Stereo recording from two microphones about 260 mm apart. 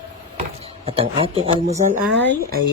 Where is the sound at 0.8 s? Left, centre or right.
Right.